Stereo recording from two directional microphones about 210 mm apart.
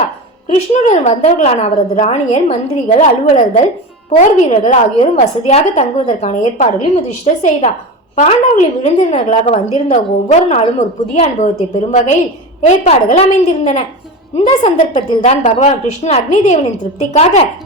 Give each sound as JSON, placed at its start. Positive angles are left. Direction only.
{"t": 0.4, "sound": "a woman's voice", "side_deg": 30}